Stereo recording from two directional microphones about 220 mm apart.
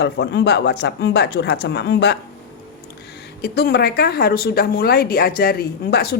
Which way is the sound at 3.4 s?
45° left (ahead or behind).